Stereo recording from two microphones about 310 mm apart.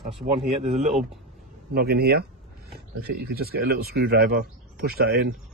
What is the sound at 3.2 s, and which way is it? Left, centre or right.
Speech, right.